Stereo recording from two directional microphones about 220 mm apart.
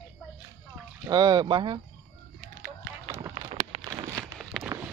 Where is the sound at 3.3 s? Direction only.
30° right (ahead or behind).